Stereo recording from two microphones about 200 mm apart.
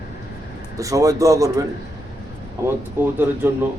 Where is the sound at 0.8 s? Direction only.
15° right (ahead or behind).